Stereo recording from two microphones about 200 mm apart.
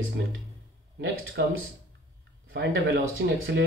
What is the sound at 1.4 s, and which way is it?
Speech, 55° right (ahead or behind).